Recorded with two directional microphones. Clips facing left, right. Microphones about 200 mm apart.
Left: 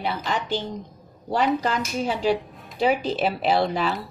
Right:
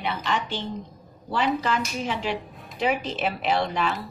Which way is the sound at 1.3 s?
40° left (ahead or behind).